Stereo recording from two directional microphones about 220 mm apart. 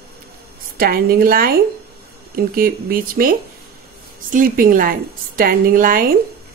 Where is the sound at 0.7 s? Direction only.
40° right (ahead or behind).